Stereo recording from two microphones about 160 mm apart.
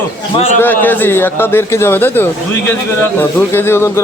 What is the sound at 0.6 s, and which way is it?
A man's voice, 10° left (ahead or behind).